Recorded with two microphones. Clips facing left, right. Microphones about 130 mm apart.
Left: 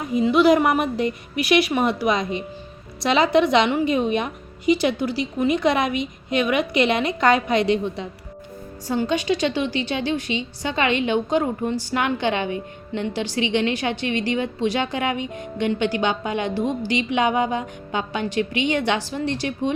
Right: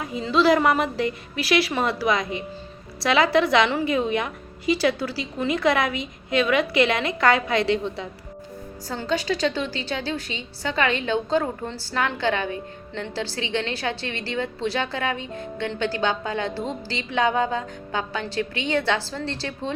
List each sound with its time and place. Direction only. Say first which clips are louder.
0.2 s a woman's voice: left 3 dB; 15° left (ahead or behind)